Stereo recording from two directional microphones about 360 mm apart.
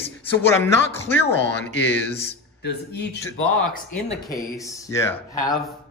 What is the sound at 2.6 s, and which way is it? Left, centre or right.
Speech, left.